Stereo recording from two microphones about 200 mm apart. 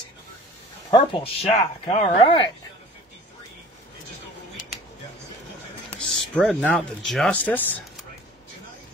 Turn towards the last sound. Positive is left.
turn(degrees=10)  # may be behind; listen again after turning